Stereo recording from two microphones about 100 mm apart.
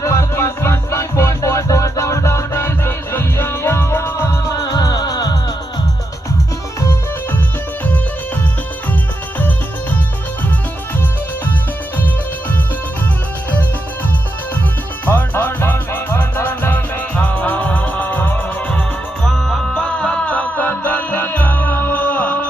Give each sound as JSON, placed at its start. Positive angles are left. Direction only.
{"t": 0.0, "sound": "music", "side_deg": 30}
{"t": 15.0, "sound": "music", "side_deg": 20}
{"t": 19.2, "sound": "music", "side_deg": 5}